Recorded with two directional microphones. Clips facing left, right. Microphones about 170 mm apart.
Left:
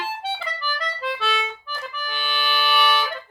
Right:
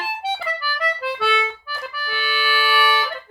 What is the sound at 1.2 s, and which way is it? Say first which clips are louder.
Music: right 6 dB; 65° right (ahead or behind).